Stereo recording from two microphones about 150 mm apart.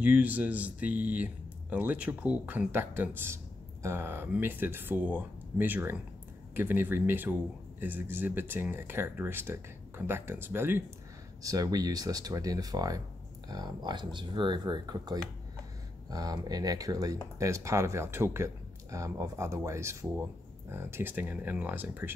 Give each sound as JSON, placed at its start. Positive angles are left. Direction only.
{"t": 0.0, "sound": "speech", "side_deg": -10}